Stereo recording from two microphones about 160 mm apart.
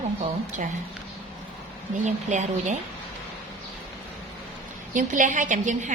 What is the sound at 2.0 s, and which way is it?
Speech, 50° right (ahead or behind).